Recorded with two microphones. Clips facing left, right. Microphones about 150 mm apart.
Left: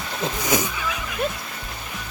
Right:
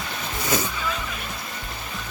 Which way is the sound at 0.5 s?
15° left (ahead or behind).